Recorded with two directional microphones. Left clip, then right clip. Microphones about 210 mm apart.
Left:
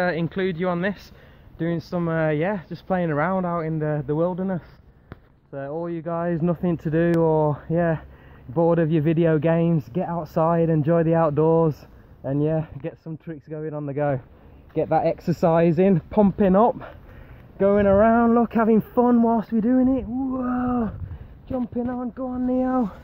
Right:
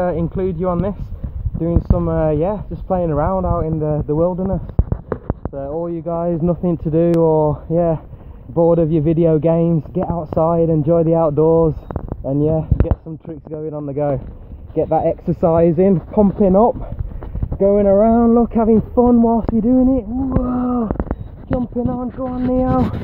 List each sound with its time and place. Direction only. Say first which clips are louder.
0.0 s speech: right 4 dB; 45° left (ahead or behind)
17.9 s speech: right 4 dB; 40° left (ahead or behind)
21.5 s speech: right 6 dB; 35° left (ahead or behind)